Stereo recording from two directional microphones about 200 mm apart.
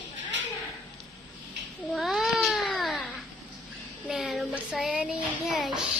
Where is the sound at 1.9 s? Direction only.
Centre (ahead or behind).